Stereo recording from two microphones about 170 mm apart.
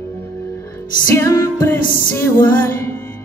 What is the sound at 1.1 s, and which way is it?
Music, 20° left (ahead or behind).